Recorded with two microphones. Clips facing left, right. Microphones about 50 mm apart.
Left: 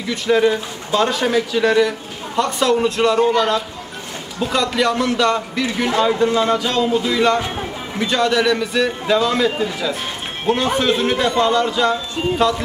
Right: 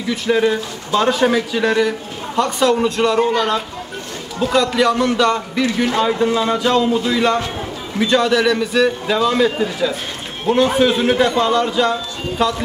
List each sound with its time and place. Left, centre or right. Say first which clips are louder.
0.1 s a man's voice: even; centre